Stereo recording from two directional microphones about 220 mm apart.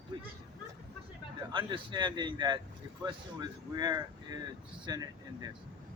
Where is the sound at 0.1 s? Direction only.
20° right (ahead or behind).